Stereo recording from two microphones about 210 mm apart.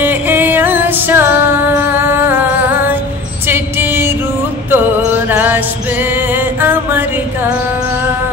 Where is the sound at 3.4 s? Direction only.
10° right (ahead or behind).